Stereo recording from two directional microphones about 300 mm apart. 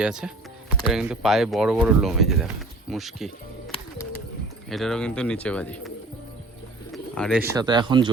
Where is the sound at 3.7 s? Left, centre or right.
Centre.